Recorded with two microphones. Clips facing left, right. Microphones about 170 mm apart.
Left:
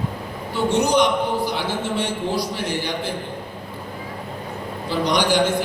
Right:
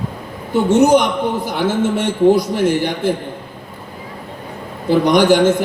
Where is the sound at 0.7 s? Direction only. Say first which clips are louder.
Right 6 dB; 50° right (ahead or behind).